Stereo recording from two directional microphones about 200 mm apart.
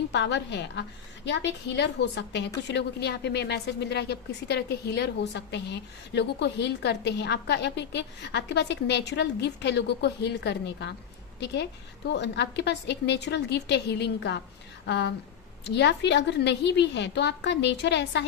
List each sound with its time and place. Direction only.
0.1 s a woman's voice: 60° left (ahead or behind)